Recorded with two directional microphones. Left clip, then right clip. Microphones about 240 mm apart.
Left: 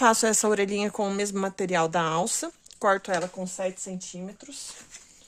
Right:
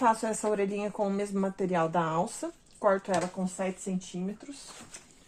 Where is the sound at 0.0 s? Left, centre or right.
Left.